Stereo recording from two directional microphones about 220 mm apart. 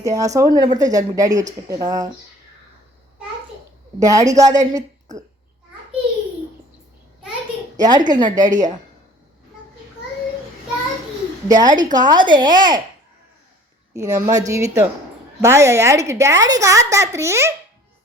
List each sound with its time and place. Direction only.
0.0 s a woman's voice: 15° right (ahead or behind)
4.0 s a woman's voice: 15° right (ahead or behind)
7.8 s a woman's voice: 20° right (ahead or behind)
11.4 s a woman's voice: 15° right (ahead or behind)
13.9 s a woman's voice: 15° right (ahead or behind)